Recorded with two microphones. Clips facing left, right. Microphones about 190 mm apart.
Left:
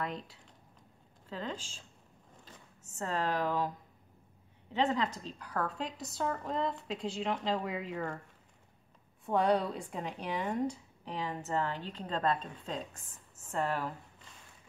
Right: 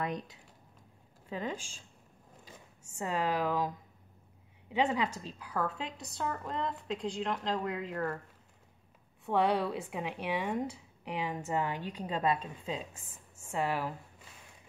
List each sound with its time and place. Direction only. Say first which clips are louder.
0.0 s speech: right 2 dB; 20° right (ahead or behind)
4.7 s speech: right 1 dB; 10° right (ahead or behind)
9.2 s speech: even; 5° right (ahead or behind)